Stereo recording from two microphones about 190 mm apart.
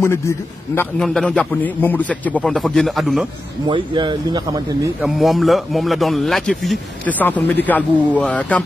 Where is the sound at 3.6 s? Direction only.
25° right (ahead or behind).